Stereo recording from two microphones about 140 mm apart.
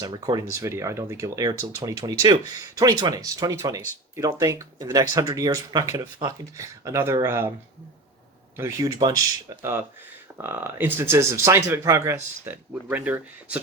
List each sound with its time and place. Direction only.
0.0 s speech: 25° right (ahead or behind)
8.5 s speech: 20° right (ahead or behind)